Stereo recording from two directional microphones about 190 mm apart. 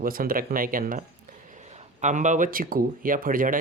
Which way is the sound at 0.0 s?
50° right (ahead or behind).